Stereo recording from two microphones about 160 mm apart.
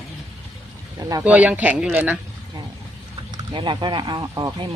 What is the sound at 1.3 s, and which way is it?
Speech, 10° right (ahead or behind).